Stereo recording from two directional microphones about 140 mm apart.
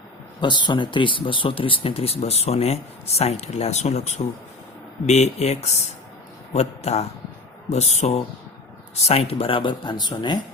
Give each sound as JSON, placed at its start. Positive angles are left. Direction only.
{"t": 0.3, "sound": "speech", "side_deg": 30}